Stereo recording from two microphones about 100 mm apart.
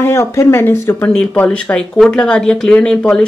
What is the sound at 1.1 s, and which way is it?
Speech, 10° left (ahead or behind).